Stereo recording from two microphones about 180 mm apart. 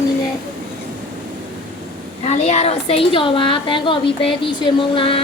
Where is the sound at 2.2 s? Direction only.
40° left (ahead or behind).